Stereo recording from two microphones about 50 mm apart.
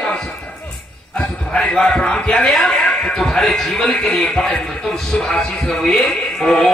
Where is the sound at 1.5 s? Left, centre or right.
Centre.